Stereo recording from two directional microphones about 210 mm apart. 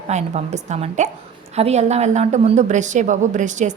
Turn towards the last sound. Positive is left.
turn(degrees=-35)  # may be behind; listen again after turning